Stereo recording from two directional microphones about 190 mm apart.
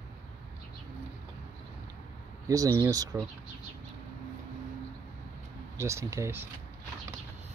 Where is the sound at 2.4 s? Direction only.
20° right (ahead or behind).